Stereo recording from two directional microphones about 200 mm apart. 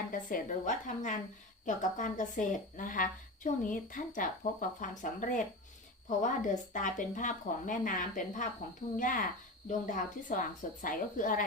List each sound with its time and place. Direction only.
0.1 s a woman's voice: 40° left (ahead or behind)